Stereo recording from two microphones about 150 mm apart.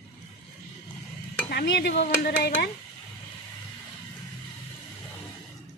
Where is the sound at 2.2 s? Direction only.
90° left.